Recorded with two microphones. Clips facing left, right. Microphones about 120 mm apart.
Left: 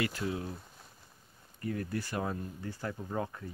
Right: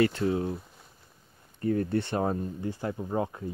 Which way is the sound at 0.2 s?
35° right (ahead or behind).